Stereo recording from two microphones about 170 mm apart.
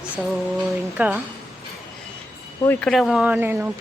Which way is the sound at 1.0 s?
10° right (ahead or behind).